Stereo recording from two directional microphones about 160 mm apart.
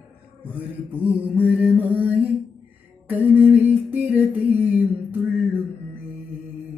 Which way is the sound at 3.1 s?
10° right (ahead or behind).